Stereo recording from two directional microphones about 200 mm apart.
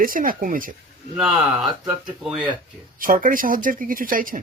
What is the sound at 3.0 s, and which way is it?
Speech, 45° right (ahead or behind).